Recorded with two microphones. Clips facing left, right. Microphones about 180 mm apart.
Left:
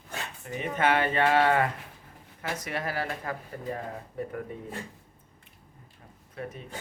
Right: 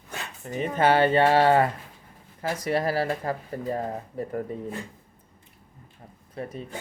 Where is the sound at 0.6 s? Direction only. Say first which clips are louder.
Right 5 dB; 35° right (ahead or behind).